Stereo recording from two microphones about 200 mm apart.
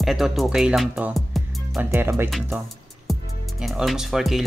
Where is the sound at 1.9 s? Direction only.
10° right (ahead or behind).